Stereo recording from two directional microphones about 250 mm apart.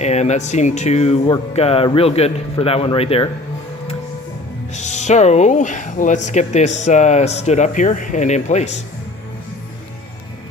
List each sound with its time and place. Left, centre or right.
0.0 s speech: left
4.7 s speech: left